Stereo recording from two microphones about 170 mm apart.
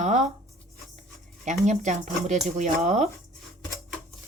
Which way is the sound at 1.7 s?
45° right (ahead or behind).